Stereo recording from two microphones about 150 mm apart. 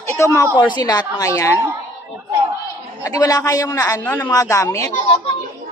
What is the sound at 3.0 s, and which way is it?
Speech, 25° left (ahead or behind).